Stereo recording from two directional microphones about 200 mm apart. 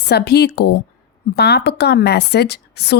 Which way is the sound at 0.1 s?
55° left (ahead or behind).